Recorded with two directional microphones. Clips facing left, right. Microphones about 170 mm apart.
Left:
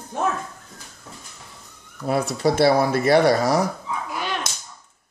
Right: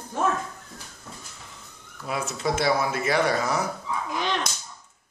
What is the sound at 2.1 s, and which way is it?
Speech, 35° left (ahead or behind).